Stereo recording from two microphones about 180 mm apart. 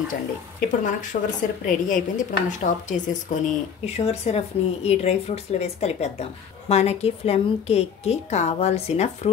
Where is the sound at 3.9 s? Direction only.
35° left (ahead or behind).